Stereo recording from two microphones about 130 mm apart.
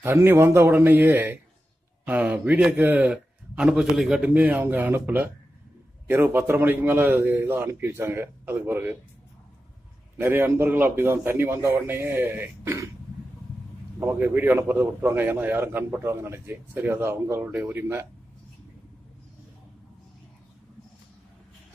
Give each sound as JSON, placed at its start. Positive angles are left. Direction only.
{"t": 0.0, "sound": "a man's voice", "side_deg": -20}
{"t": 10.1, "sound": "a man's voice", "side_deg": -15}
{"t": 13.9, "sound": "a man's voice", "side_deg": -20}